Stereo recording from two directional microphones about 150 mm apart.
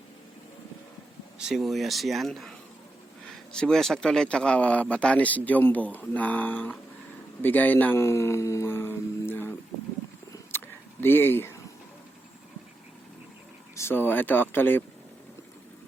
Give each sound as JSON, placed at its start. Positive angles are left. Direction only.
{"t": 1.4, "sound": "speech", "side_deg": 0}
{"t": 7.4, "sound": "a sound", "side_deg": 10}
{"t": 11.0, "sound": "speech", "side_deg": 15}
{"t": 13.7, "sound": "speech", "side_deg": 15}